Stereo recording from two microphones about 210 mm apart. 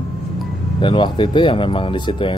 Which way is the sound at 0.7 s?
20° left (ahead or behind).